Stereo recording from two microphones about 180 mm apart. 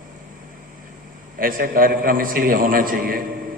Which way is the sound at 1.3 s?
55° right (ahead or behind).